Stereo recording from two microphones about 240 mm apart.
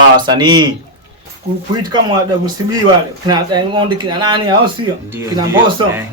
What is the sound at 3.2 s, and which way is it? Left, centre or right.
Speech, centre.